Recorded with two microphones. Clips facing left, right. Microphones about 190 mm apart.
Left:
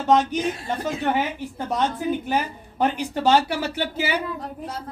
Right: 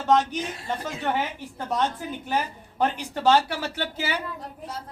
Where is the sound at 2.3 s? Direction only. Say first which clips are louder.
Left 3 dB; 15° left (ahead or behind).